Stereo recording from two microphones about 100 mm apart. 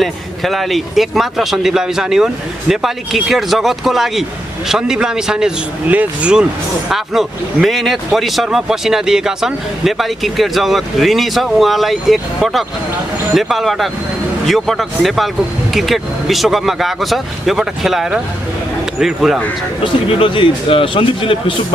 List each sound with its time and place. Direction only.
0.0 s speech: centre (ahead or behind)
6.9 s speech: centre (ahead or behind)
19.8 s a man's voice: 60° left (ahead or behind)